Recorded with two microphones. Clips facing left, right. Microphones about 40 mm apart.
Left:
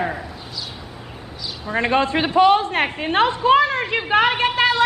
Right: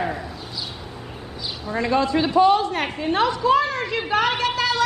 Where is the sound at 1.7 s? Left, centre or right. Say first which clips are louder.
Left 2 dB; left.